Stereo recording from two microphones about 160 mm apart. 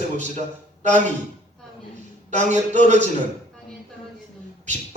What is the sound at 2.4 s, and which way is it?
Speech, 50° right (ahead or behind).